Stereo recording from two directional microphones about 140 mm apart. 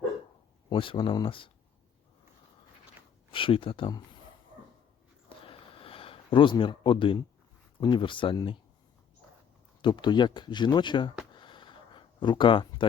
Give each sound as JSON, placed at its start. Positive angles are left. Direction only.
{"t": 0.7, "sound": "speech", "side_deg": 35}
{"t": 3.3, "sound": "speech", "side_deg": 40}
{"t": 5.5, "sound": "a sound", "side_deg": 40}
{"t": 7.8, "sound": "speech", "side_deg": 35}
{"t": 9.8, "sound": "speech", "side_deg": 30}
{"t": 11.3, "sound": "a sound", "side_deg": 35}